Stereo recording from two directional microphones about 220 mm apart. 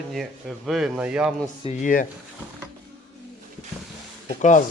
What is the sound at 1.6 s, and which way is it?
Speech, 35° left (ahead or behind).